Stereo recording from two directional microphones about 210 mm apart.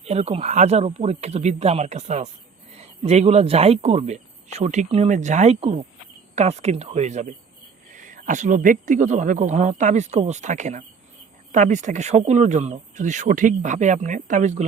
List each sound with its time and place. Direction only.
0.0 s speech: 30° right (ahead or behind)